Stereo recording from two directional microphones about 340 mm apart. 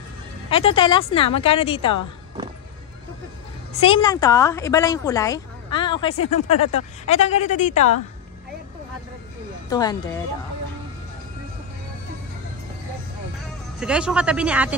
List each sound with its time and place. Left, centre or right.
0.5 s speech: centre
3.7 s speech: centre
9.7 s speech: centre
13.7 s speech: centre